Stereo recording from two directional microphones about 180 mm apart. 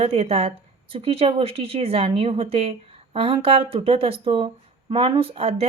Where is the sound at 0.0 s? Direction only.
35° right (ahead or behind).